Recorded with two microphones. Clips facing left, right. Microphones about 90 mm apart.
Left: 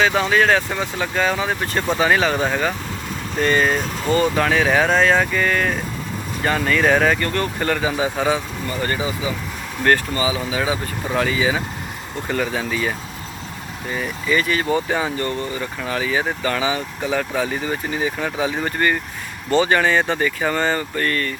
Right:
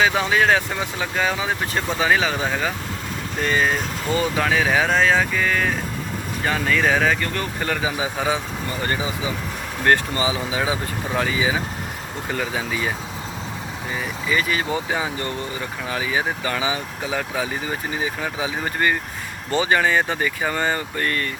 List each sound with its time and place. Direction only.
0.0 s speech: 10° right (ahead or behind)
8.8 s speech: 25° right (ahead or behind)
13.9 s speech: 10° right (ahead or behind)